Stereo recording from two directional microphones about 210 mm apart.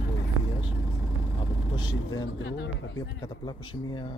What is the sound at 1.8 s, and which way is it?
Speech, 20° left (ahead or behind).